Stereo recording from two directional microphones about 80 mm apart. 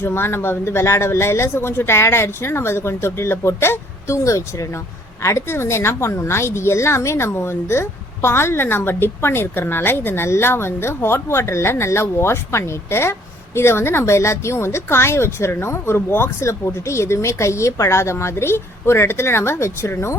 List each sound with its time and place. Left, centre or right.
0.0 s a woman's voice: left